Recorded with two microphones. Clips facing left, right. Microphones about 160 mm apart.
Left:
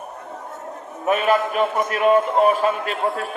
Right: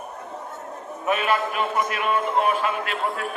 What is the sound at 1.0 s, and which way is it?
A man's voice, 40° left (ahead or behind).